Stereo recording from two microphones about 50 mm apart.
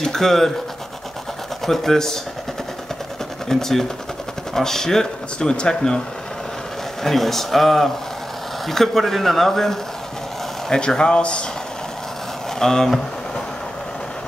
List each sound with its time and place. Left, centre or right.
0.0 s speech: centre
1.7 s speech: centre
3.4 s speech: centre
7.0 s speech: centre; by 11.4 s left
12.5 s speech: centre